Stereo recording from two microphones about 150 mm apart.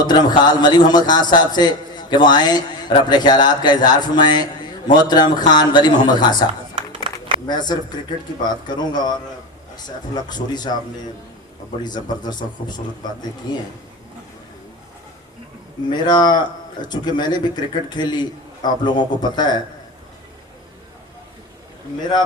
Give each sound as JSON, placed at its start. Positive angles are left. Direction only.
{"t": 0.0, "sound": "a man's voice", "side_deg": 30}
{"t": 7.1, "sound": "a sound", "side_deg": -35}
{"t": 7.4, "sound": "a man's voice", "side_deg": 30}
{"t": 10.2, "sound": "a man's voice", "side_deg": 30}
{"t": 11.8, "sound": "a man's voice", "side_deg": 30}
{"t": 15.9, "sound": "a man's voice", "side_deg": 30}